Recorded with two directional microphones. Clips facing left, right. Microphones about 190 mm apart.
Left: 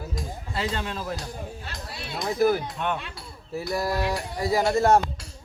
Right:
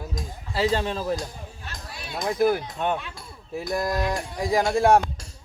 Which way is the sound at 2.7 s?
35° right (ahead or behind).